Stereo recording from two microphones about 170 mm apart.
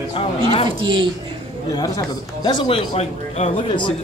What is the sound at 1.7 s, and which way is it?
Speech, 25° left (ahead or behind).